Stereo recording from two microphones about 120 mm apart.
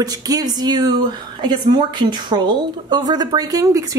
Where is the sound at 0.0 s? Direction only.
30° right (ahead or behind).